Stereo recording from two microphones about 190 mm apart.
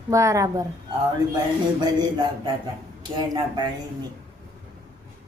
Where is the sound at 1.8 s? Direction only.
25° right (ahead or behind).